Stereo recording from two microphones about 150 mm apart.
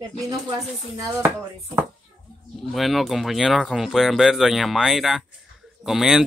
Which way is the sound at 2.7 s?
Centre (ahead or behind).